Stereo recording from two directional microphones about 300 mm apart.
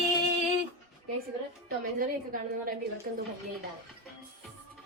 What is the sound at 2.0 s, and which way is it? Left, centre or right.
Speech, right.